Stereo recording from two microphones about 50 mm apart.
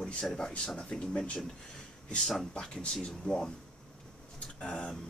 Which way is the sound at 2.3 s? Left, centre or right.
Centre.